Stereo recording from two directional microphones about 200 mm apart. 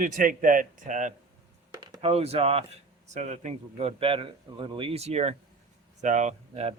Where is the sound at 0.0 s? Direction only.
40° right (ahead or behind).